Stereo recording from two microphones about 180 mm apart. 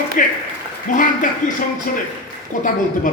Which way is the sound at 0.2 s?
50° left (ahead or behind).